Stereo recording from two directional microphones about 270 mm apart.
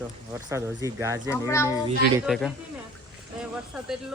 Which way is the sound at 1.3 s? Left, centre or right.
Centre.